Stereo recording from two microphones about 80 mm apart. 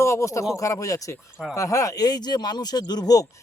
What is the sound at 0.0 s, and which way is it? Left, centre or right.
Speech, left.